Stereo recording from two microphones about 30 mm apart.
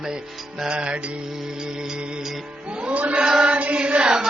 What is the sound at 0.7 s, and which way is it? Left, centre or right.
Music, right.